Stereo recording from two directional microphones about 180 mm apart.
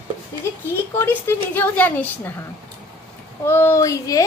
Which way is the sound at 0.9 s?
10° left (ahead or behind).